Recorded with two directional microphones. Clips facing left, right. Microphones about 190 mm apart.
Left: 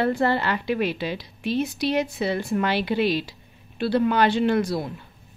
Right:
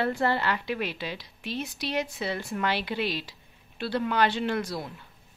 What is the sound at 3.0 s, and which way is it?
Speech, 60° left (ahead or behind).